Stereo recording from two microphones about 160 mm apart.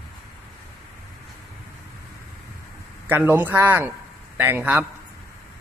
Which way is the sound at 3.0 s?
10° right (ahead or behind).